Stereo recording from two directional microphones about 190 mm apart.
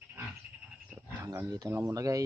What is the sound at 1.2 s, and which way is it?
Speech, 15° right (ahead or behind).